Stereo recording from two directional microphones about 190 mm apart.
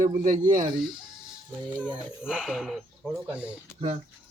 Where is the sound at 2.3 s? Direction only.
Centre (ahead or behind).